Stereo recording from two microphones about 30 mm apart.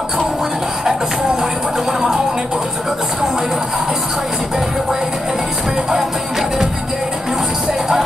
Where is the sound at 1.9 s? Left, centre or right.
Centre.